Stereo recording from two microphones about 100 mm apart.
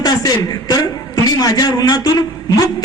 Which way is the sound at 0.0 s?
40° left (ahead or behind).